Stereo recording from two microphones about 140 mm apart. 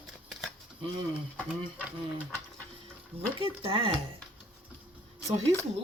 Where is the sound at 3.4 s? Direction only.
40° right (ahead or behind).